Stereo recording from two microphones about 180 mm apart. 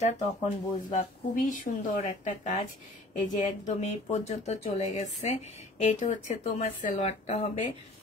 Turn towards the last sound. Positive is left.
turn(degrees=40)  # may be behind; listen again after turning